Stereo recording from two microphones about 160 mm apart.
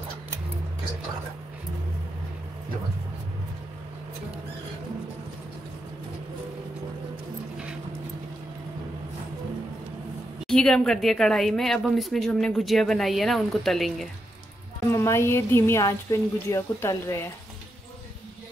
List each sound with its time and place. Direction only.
10.4 s speech: 5° left (ahead or behind)
14.9 s speech: 15° left (ahead or behind)